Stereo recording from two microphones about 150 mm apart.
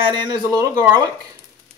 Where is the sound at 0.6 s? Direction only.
20° right (ahead or behind).